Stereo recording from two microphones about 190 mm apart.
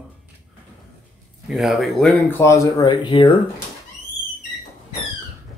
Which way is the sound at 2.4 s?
15° left (ahead or behind).